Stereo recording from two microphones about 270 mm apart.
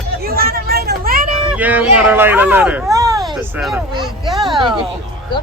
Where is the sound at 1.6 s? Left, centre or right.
Centre.